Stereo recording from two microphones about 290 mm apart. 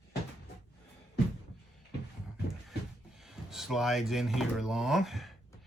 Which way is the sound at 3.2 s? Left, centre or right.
Centre.